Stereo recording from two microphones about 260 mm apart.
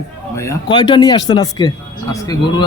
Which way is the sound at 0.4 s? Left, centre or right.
Centre.